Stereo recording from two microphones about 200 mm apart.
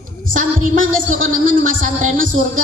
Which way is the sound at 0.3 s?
40° right (ahead or behind).